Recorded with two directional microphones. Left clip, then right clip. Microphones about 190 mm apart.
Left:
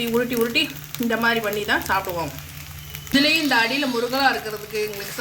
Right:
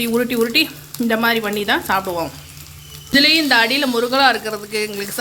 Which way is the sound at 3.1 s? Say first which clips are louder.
Right 5 dB; 50° right (ahead or behind).